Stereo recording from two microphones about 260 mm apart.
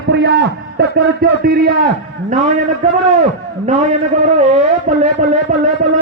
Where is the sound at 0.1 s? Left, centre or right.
Right.